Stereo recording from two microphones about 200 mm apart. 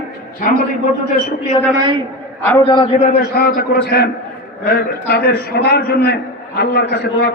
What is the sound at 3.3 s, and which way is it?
A man's voice, 50° left (ahead or behind).